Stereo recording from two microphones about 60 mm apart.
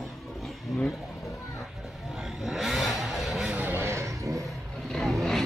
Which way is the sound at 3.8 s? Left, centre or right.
Right.